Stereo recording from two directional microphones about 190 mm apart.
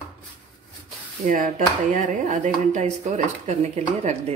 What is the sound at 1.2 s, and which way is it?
Speech, 45° right (ahead or behind).